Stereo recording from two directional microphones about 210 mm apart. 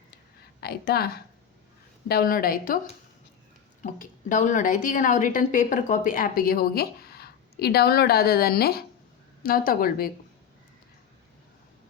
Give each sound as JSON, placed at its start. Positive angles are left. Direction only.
{"t": 0.6, "sound": "a woman's voice", "side_deg": 50}
{"t": 3.8, "sound": "a woman's voice", "side_deg": 40}